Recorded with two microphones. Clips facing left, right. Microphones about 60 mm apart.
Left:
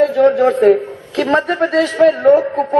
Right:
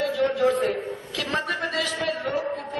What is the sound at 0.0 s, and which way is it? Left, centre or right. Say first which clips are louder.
A man's voice: left 11 dB; left.